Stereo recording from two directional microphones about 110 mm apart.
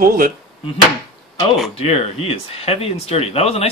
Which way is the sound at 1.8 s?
65° left (ahead or behind).